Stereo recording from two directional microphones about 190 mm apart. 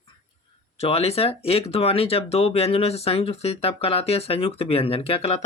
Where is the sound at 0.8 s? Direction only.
30° left (ahead or behind).